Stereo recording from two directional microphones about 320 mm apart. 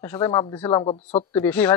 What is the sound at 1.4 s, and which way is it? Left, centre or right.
Speech, centre.